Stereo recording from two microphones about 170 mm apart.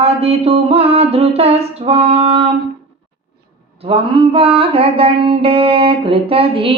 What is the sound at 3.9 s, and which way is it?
Music, 35° right (ahead or behind).